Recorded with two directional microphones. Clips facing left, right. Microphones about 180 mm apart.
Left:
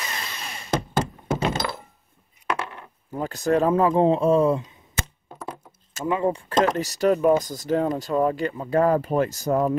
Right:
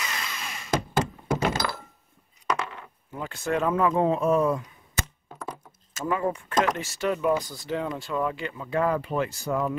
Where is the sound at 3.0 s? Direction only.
40° left (ahead or behind); by 6.6 s 25° left (ahead or behind).